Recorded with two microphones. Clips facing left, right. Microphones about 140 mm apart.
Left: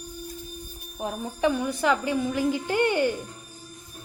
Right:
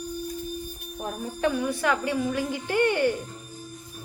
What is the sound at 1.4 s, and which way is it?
A woman's voice, 20° left (ahead or behind).